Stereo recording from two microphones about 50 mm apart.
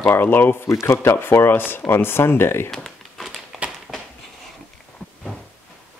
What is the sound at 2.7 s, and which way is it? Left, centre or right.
Crumpling, centre.